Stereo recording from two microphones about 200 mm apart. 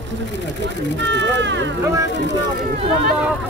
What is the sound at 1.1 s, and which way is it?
Speech, 65° right (ahead or behind).